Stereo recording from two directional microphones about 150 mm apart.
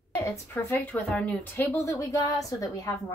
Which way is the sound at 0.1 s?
15° left (ahead or behind).